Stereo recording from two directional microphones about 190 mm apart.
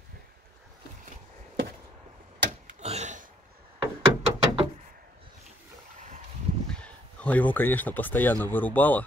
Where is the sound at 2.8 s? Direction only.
35° right (ahead or behind).